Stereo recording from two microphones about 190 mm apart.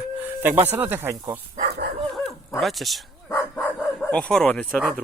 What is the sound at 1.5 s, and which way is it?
Dog, 55° right (ahead or behind).